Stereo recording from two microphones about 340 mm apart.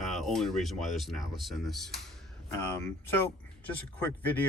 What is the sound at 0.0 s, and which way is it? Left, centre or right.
Speech, centre.